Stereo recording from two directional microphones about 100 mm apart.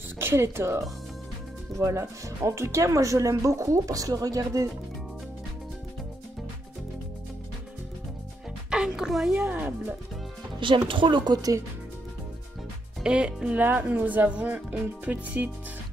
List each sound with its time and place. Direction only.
0.2 s speech: 25° right (ahead or behind)
8.6 s music: 10° right (ahead or behind)
9.3 s speech: 20° right (ahead or behind)
10.9 s speech: 55° right (ahead or behind); by 11.6 s 40° right (ahead or behind)
13.0 s speech: 10° right (ahead or behind)